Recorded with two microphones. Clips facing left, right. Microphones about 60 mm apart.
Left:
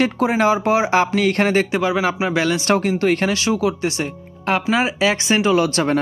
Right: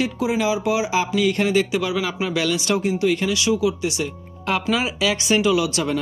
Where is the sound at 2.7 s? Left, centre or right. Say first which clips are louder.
Left 3 dB; left.